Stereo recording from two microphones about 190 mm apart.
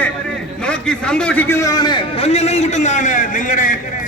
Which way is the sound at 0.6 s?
5° left (ahead or behind).